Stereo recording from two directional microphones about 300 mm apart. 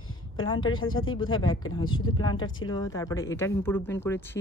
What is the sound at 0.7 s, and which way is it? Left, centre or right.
Speech, left.